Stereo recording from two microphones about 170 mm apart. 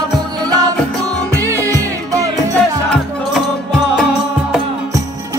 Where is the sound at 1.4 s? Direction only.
15° right (ahead or behind).